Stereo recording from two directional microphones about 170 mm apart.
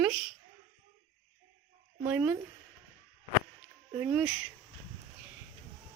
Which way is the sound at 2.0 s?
10° right (ahead or behind).